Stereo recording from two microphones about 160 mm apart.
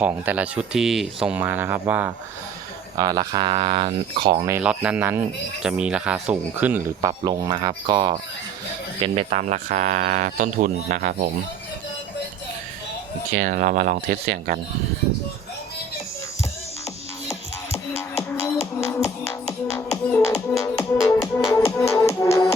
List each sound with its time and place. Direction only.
0.0 s speech: 10° right (ahead or behind)
3.0 s speech: 25° right (ahead or behind)
4.6 s speech: 5° right (ahead or behind)
7.1 s speech: 25° right (ahead or behind)
9.0 s speech: 40° right (ahead or behind); by 11.3 s 65° right (ahead or behind)
13.3 s speech: 55° right (ahead or behind)
18.2 s music: 20° left (ahead or behind)
19.5 s music: 5° left (ahead or behind)
20.7 s music: 20° left (ahead or behind)